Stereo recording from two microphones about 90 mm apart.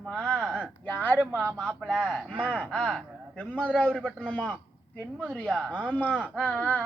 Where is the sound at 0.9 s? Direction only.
20° left (ahead or behind).